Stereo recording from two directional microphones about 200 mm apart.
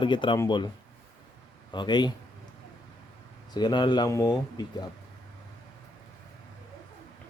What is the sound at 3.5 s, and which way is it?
Speech, 20° left (ahead or behind).